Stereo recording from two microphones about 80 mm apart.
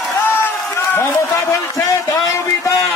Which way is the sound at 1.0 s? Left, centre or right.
Left.